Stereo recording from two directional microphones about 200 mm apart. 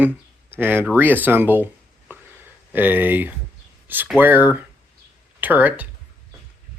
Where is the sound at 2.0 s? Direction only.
10° right (ahead or behind).